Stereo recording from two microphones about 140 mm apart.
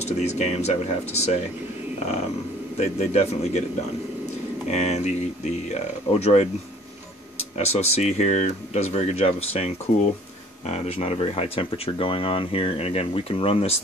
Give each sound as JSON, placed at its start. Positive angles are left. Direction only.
{"t": 0.0, "sound": "speech", "side_deg": 50}
{"t": 2.8, "sound": "speech", "side_deg": 50}
{"t": 4.6, "sound": "speech", "side_deg": 50}
{"t": 7.5, "sound": "speech", "side_deg": 50}